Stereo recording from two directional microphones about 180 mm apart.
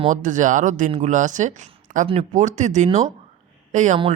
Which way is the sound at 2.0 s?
35° right (ahead or behind).